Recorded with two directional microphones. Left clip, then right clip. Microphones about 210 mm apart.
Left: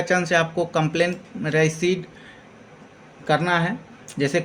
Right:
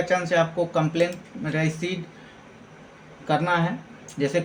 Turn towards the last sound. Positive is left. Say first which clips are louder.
# left 2 dB
turn(degrees=55)  # may be behind; listen again after turning